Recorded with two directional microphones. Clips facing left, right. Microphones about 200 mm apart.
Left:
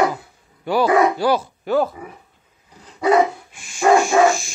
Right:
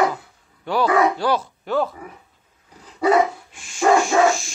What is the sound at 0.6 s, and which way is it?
Speech, 5° left (ahead or behind).